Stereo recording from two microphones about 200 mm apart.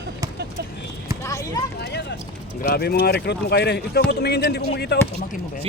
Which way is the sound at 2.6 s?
50° left (ahead or behind).